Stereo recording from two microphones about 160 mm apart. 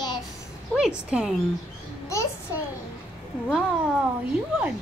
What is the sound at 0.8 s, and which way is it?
Speech, 5° right (ahead or behind).